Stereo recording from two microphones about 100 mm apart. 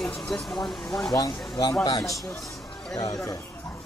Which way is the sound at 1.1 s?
40° left (ahead or behind).